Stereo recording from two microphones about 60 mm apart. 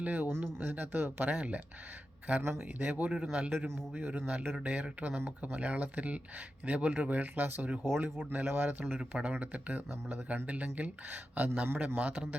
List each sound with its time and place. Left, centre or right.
0.0 s speech: right
0.3 s speech: right
2.4 s speech: right
7.9 s speech: right
8.2 s speech: right
9.0 s speech: centre
11.7 s speech: right
11.9 s speech: right